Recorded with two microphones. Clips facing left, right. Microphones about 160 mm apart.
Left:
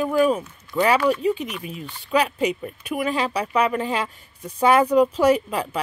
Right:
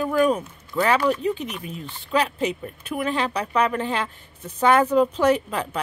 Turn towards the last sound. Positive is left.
turn(degrees=10)  # may be behind; listen again after turning